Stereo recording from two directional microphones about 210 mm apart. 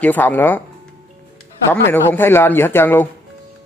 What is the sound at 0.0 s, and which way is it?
Speech, 10° left (ahead or behind).